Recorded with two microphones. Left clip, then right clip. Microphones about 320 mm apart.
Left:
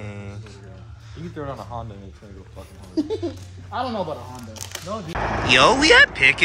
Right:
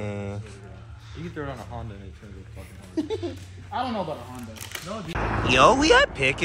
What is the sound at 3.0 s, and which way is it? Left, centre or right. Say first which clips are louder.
Speech: left 4 dB; left.